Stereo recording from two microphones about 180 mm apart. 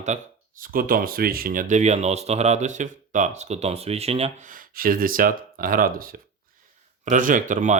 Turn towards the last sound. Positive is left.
turn(degrees=-45)  # may be behind; listen again after turning